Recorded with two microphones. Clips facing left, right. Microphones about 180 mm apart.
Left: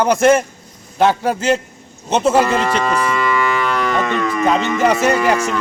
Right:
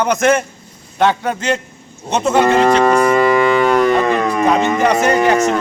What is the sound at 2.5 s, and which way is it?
Cattle, 45° right (ahead or behind).